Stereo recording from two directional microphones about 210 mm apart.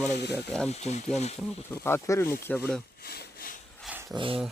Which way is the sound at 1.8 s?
10° left (ahead or behind).